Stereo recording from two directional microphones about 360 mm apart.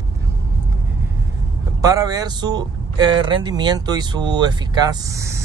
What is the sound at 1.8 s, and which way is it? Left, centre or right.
Speech, centre.